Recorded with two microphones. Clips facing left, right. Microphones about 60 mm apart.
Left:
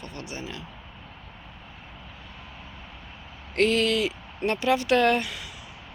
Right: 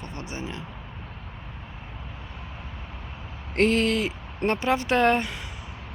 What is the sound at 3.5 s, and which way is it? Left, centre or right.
Speech, right.